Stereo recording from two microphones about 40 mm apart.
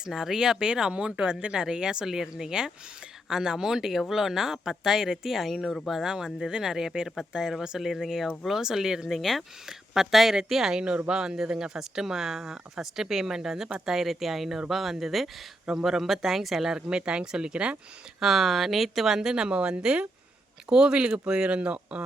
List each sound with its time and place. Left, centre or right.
0.1 s speech: centre
10.8 s speech: right
11.1 s speech: centre
16.9 s speech: right
18.2 s speech: centre
19.4 s speech: right